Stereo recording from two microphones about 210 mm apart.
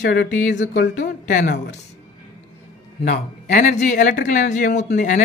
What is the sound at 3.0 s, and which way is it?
Speech, 40° left (ahead or behind).